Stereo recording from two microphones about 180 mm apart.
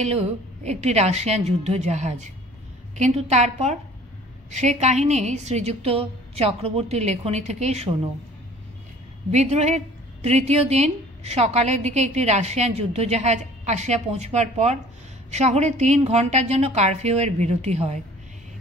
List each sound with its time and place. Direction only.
0.0 s a woman's voice: 35° right (ahead or behind)
9.3 s a woman's voice: 40° right (ahead or behind)